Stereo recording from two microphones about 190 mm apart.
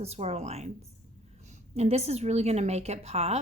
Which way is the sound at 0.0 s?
35° right (ahead or behind).